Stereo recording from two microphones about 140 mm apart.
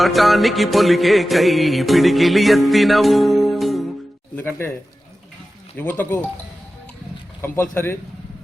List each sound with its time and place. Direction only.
0.0 s music: centre (ahead or behind)
4.4 s speech: 15° left (ahead or behind)
5.7 s speech: 15° left (ahead or behind)
7.4 s speech: 15° left (ahead or behind)